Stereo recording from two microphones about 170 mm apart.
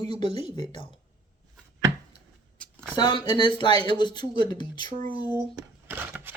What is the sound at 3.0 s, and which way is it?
Speech, 25° left (ahead or behind).